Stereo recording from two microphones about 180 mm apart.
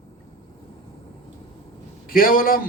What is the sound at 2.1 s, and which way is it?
Speech, 55° left (ahead or behind).